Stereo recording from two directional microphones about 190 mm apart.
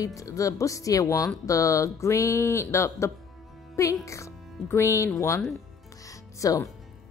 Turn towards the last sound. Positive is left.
turn(degrees=15)  # may be behind; listen again after turning